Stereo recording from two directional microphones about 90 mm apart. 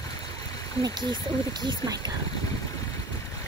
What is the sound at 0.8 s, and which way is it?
Speech, 55° right (ahead or behind).